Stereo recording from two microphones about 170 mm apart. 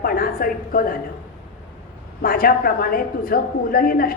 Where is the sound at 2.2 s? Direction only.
60° left (ahead or behind).